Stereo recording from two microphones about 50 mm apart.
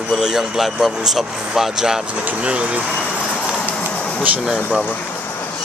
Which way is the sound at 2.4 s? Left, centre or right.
Right.